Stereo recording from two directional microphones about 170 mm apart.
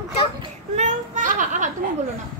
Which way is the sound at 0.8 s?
50° right (ahead or behind).